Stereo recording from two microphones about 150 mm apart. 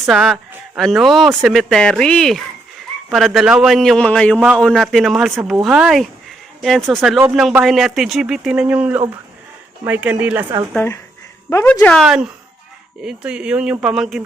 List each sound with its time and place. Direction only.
0.1 s speech: centre (ahead or behind)
10.8 s speech: 15° left (ahead or behind); by 14.2 s 5° right (ahead or behind)